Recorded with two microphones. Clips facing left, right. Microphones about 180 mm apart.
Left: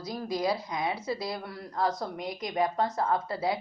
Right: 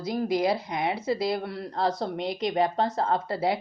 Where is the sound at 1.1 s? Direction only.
25° right (ahead or behind).